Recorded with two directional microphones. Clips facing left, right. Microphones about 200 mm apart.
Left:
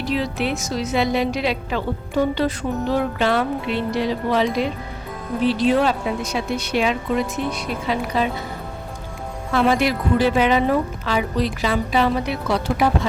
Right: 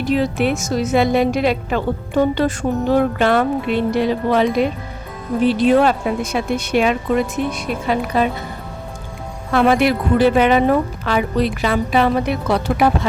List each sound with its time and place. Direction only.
0.0 s a woman's voice: 50° right (ahead or behind)
9.5 s speech: 55° right (ahead or behind)